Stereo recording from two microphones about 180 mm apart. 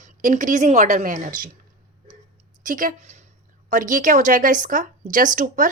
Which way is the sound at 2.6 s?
50° right (ahead or behind).